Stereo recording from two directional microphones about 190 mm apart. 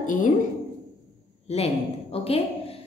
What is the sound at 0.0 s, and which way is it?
Speech, 45° left (ahead or behind).